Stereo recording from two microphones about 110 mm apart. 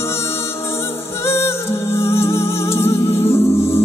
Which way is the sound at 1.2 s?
25° left (ahead or behind).